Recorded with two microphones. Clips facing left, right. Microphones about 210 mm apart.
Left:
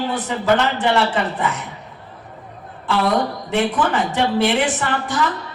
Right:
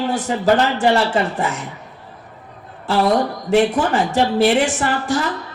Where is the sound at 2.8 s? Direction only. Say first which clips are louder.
Right 2 dB; 40° right (ahead or behind).